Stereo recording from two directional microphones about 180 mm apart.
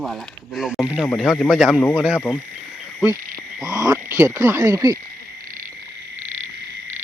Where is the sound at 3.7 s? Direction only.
20° right (ahead or behind).